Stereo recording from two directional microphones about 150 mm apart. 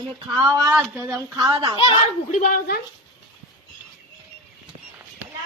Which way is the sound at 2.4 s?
65° left (ahead or behind).